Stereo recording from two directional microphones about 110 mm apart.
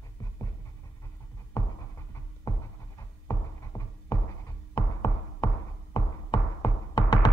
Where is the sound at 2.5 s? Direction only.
25° left (ahead or behind).